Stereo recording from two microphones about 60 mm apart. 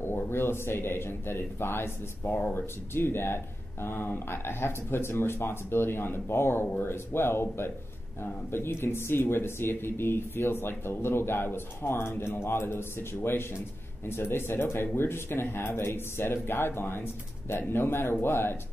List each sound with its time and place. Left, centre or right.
0.3 s a man's voice: left